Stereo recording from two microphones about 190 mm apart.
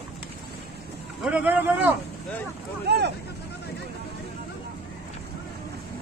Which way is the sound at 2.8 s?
60° right (ahead or behind).